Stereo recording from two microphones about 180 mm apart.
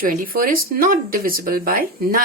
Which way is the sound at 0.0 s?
50° right (ahead or behind).